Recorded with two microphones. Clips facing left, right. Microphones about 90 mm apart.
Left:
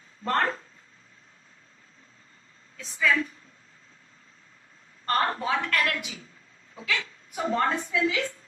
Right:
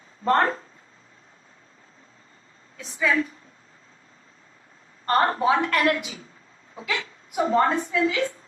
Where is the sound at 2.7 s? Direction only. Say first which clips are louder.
Right 1 dB; 25° right (ahead or behind).